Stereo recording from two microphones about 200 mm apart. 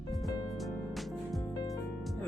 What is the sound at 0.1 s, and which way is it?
Music, centre (ahead or behind).